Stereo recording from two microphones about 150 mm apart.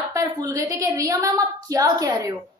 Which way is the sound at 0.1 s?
20° right (ahead or behind).